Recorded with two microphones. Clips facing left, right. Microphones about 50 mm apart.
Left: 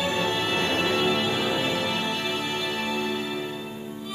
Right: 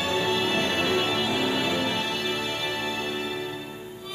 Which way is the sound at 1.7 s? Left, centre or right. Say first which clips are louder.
Even; left.